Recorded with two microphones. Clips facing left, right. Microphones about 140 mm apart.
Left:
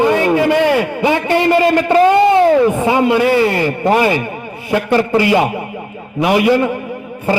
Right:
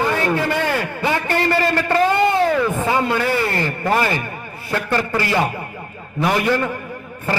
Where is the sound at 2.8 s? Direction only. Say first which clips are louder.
Left 6 dB; 15° left (ahead or behind).